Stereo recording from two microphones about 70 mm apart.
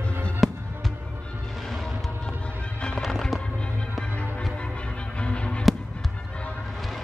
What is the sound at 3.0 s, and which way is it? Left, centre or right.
Music, centre.